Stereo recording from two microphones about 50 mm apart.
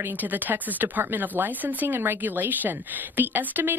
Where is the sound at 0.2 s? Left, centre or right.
Right.